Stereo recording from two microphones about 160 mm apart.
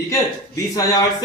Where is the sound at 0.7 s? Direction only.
25° left (ahead or behind).